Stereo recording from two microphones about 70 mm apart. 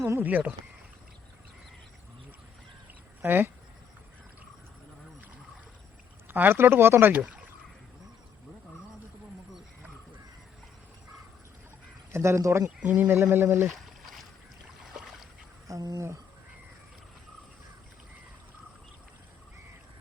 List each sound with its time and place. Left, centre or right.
0.2 s speech: right
3.2 s speech: right
6.2 s speech: right
12.1 s speech: right
12.8 s speech: right
13.1 s speech: right
14.9 s boat: centre
15.6 s speech: right